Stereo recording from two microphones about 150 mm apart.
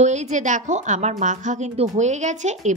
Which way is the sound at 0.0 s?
50° right (ahead or behind).